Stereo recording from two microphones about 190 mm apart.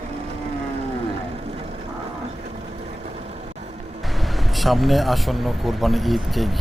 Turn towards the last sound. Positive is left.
turn(degrees=0)  # may be behind; listen again after turning